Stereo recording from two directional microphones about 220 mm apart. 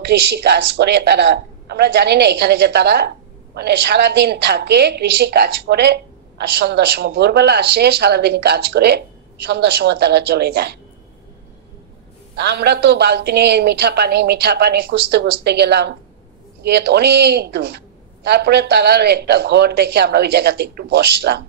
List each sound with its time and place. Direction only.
0.0 s a woman's voice: 50° right (ahead or behind)
12.4 s a woman's voice: 50° right (ahead or behind)